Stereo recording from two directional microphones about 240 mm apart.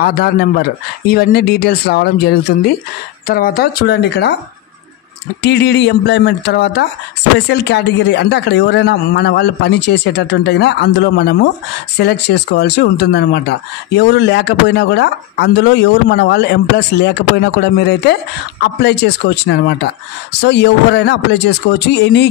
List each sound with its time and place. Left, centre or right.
0.0 s speech: left
5.4 s speech: left